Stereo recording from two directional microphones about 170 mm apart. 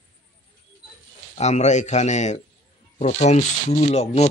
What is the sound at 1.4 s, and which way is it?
Speech, 45° left (ahead or behind).